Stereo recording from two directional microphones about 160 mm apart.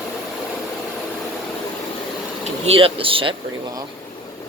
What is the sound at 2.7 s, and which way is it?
Speech, 35° right (ahead or behind).